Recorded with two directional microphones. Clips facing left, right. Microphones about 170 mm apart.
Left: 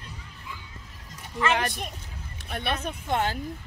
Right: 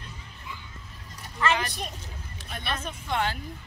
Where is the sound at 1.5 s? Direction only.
55° left (ahead or behind).